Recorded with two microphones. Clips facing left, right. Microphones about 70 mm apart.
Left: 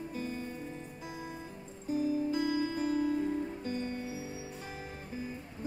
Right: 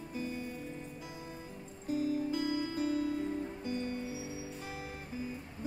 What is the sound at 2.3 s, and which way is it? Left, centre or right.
Music, left.